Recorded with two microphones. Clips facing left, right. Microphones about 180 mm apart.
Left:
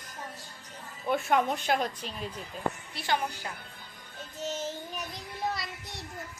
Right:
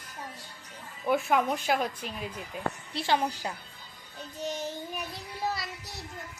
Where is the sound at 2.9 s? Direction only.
30° right (ahead or behind).